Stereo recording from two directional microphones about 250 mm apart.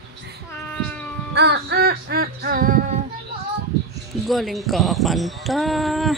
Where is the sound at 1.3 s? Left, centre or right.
Right.